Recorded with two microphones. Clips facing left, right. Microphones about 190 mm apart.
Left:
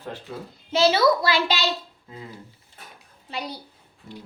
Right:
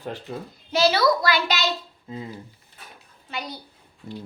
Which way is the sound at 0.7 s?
25° left (ahead or behind).